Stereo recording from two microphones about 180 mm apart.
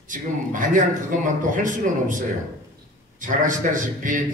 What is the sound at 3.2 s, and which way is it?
Speech, 45° right (ahead or behind).